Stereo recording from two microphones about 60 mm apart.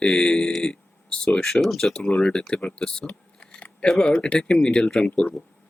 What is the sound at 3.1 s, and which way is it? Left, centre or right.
Scissors, left.